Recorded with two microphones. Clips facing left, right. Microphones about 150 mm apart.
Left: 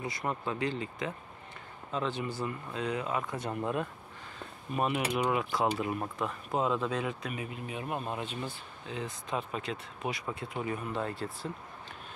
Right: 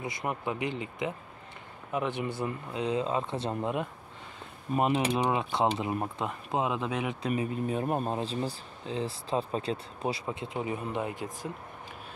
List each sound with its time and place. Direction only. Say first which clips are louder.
0.0 s speech: right 1 dB; 20° right (ahead or behind)